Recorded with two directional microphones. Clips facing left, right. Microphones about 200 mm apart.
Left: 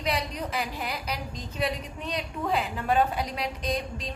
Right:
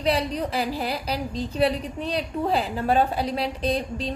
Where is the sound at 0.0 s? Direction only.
30° right (ahead or behind).